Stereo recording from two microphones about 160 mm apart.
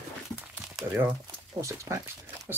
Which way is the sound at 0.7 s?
10° right (ahead or behind).